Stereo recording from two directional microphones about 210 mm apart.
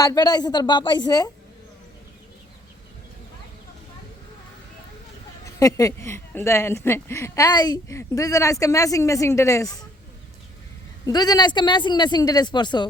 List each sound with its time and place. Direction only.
0.0 s speech: 15° left (ahead or behind)
5.5 s speech: 15° left (ahead or behind)
11.0 s speech: 20° left (ahead or behind)